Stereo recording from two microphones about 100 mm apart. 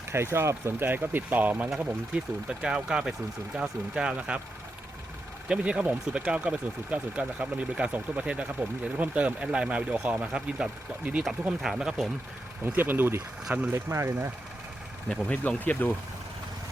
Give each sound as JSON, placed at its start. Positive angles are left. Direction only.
{"t": 0.1, "sound": "speech", "side_deg": -25}
{"t": 5.5, "sound": "speech", "side_deg": -10}
{"t": 12.6, "sound": "speech", "side_deg": -20}
{"t": 13.7, "sound": "speech", "side_deg": -30}
{"t": 15.1, "sound": "speech", "side_deg": 10}